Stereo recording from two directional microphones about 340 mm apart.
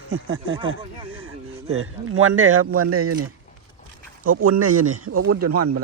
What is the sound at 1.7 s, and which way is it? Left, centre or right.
Speech, right.